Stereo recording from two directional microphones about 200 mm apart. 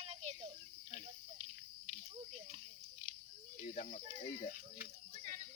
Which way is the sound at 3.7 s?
40° left (ahead or behind).